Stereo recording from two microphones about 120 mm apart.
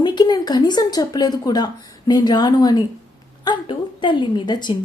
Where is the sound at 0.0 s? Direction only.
40° left (ahead or behind).